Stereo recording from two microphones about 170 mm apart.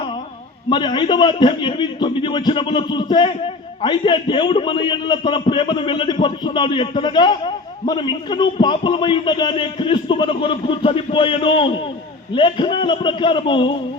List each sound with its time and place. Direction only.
0.7 s a man's voice: 25° left (ahead or behind)